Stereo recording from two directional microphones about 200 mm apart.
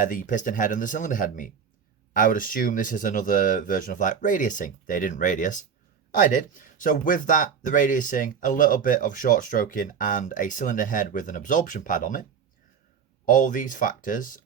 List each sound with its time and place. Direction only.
0.1 s speech: 40° left (ahead or behind)
6.7 s speech: 45° left (ahead or behind)
13.2 s speech: 40° left (ahead or behind)